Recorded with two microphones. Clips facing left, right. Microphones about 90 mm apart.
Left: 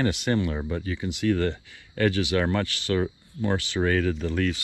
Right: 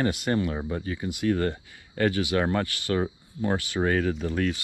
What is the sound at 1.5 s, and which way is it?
Speech, 90° left.